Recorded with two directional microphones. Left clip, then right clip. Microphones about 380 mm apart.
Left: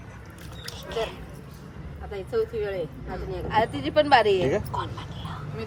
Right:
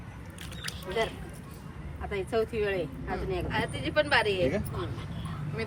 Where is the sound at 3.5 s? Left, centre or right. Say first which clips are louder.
Left 9 dB; left.